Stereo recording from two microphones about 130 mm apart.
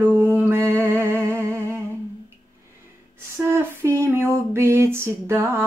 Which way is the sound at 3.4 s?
20° right (ahead or behind).